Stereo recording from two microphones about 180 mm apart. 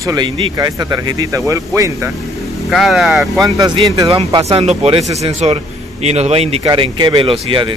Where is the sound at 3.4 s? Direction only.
20° right (ahead or behind).